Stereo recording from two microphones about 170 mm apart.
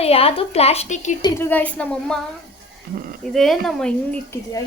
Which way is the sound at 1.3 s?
10° left (ahead or behind).